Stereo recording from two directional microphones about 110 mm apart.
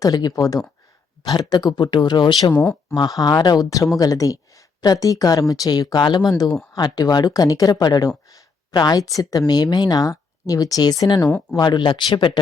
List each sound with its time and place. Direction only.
0.0 s speech: 35° left (ahead or behind)
2.5 s speech: 15° left (ahead or behind)
2.9 s speech: 40° left (ahead or behind)